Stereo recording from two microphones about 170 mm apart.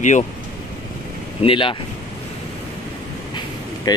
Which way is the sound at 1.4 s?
30° left (ahead or behind).